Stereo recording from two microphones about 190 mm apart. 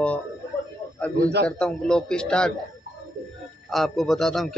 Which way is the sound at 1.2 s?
60° right (ahead or behind).